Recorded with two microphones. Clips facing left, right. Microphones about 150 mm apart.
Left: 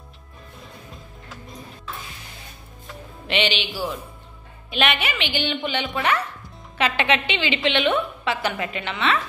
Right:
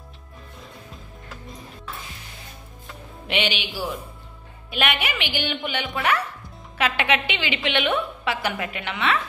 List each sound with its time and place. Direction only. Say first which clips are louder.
3.3 s a woman's voice: left 2 dB; 10° right (ahead or behind)